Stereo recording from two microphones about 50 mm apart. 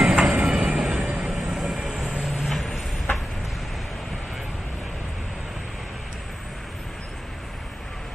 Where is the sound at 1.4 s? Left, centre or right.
Centre.